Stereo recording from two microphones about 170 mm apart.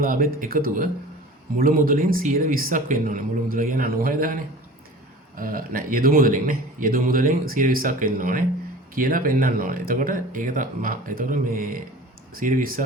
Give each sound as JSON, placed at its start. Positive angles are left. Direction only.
{"t": 0.0, "sound": "speech", "side_deg": -55}
{"t": 5.4, "sound": "speech", "side_deg": -55}